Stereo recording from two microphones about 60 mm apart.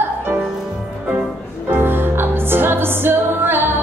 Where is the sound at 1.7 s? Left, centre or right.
Right.